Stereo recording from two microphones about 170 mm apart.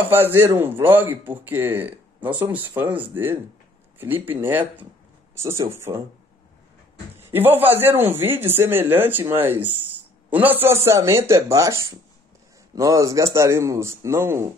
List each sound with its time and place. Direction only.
0.1 s a man's voice: 15° right (ahead or behind)
7.2 s a man's voice: 15° right (ahead or behind)